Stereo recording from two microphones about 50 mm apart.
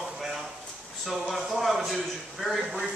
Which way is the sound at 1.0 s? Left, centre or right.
Centre.